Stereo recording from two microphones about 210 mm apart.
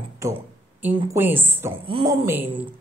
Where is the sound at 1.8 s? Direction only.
20° right (ahead or behind).